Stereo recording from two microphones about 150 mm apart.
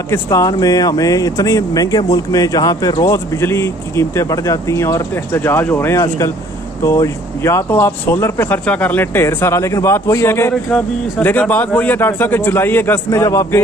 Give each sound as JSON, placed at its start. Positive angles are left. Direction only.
{"t": 0.1, "sound": "speech", "side_deg": 20}
{"t": 10.5, "sound": "speech", "side_deg": 5}